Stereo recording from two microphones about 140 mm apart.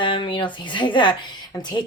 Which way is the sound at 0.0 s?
35° left (ahead or behind).